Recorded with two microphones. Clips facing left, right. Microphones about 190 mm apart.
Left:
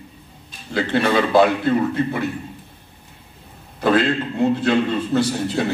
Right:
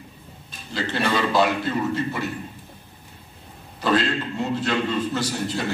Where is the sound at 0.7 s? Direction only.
55° left (ahead or behind).